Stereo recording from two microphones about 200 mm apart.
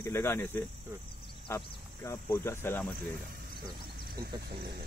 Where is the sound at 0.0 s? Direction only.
10° left (ahead or behind).